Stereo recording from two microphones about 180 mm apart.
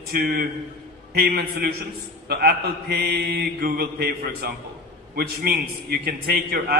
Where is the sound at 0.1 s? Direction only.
55° right (ahead or behind).